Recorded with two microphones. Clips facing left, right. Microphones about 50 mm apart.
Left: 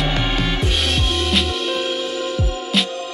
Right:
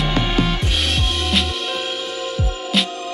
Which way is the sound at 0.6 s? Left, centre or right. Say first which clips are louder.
Left 1 dB; centre.